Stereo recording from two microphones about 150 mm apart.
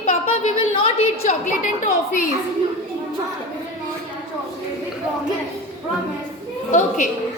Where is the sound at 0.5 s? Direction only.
35° left (ahead or behind).